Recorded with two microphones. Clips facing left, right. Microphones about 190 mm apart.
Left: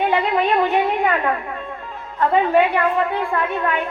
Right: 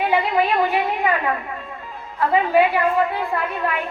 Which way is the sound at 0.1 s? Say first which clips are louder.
Left 1 dB; 5° right (ahead or behind).